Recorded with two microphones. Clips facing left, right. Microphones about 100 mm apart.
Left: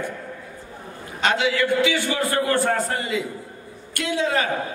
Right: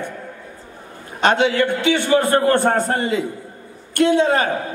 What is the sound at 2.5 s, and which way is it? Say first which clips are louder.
Speech: right 4 dB; 55° right (ahead or behind).